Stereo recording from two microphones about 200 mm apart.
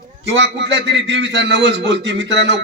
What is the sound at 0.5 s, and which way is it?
A man's voice, 65° right (ahead or behind).